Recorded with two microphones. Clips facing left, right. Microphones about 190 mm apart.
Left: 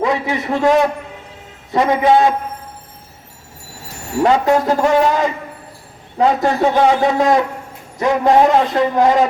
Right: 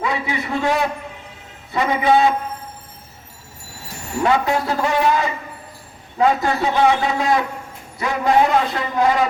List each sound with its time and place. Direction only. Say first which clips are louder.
0.0 s a man's voice: left 5 dB; 45° left (ahead or behind)
4.2 s a man's voice: left 5 dB; 45° left (ahead or behind)
6.4 s a man's voice: left 4 dB; 45° left (ahead or behind)